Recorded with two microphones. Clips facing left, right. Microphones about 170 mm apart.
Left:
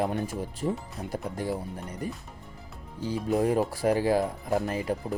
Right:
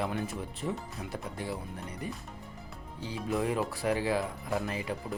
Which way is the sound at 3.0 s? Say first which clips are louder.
Left 6 dB; 40° left (ahead or behind).